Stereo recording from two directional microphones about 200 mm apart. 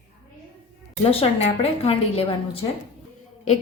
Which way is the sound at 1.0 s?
30° left (ahead or behind).